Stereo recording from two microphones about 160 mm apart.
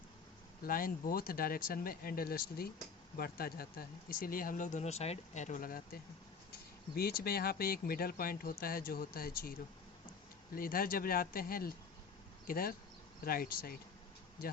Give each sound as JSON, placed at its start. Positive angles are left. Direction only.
{"t": 0.6, "sound": "speech", "side_deg": 60}
{"t": 6.5, "sound": "speech", "side_deg": 75}